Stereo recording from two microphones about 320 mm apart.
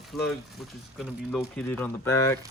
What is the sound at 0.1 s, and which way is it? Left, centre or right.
Speech, centre.